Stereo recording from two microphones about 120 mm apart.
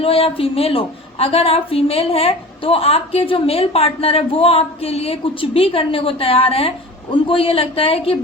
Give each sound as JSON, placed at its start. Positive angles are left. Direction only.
{"t": 0.0, "sound": "a woman's voice", "side_deg": 50}